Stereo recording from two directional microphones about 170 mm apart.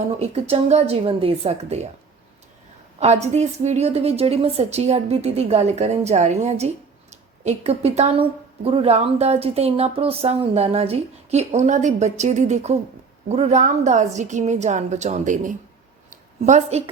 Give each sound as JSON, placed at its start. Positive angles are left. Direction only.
{"t": 0.2, "sound": "a woman's voice", "side_deg": -40}
{"t": 3.0, "sound": "a woman's voice", "side_deg": -40}
{"t": 16.0, "sound": "a sound", "side_deg": -40}